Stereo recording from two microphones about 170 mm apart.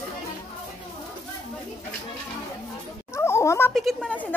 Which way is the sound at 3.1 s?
15° left (ahead or behind).